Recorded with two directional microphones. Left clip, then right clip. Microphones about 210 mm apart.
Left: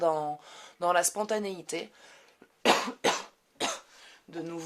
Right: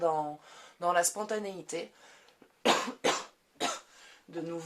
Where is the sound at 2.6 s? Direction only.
35° left (ahead or behind).